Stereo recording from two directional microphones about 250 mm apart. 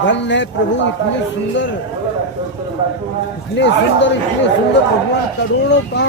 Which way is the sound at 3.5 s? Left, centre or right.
Left.